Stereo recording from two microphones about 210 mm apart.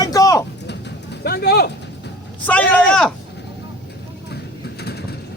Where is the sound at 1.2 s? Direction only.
50° left (ahead or behind).